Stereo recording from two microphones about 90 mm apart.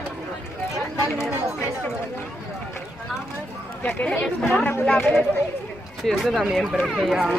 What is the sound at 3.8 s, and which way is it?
Speech, 20° left (ahead or behind).